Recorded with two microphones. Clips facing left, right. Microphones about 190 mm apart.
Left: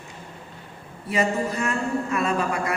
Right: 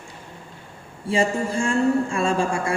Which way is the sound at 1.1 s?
30° right (ahead or behind).